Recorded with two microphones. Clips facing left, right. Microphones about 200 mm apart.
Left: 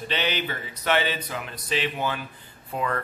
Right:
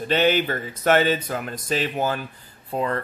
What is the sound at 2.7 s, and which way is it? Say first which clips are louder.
Speech: right 3 dB; 30° right (ahead or behind).